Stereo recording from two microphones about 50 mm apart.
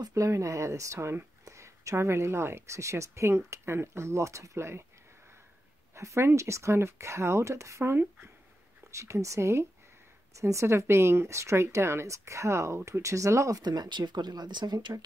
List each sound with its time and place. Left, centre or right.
0.1 s speech: right
1.4 s speech: right
5.9 s speech: right
7.9 s speech: right
8.9 s speech: right
10.3 s speech: right